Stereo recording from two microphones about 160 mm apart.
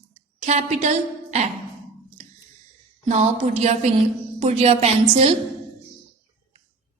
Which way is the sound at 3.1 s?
45° right (ahead or behind).